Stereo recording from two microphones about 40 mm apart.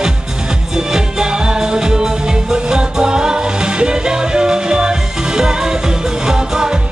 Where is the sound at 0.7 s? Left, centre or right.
Centre.